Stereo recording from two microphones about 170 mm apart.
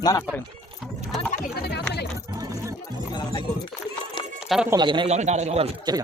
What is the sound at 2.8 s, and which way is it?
Speech, 25° left (ahead or behind).